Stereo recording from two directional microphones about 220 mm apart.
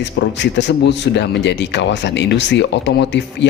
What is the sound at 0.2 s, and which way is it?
Speech, 50° left (ahead or behind).